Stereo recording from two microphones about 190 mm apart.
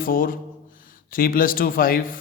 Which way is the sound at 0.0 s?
50° left (ahead or behind).